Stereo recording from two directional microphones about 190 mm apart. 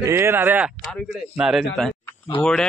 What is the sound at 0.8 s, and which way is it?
Speech, 5° left (ahead or behind).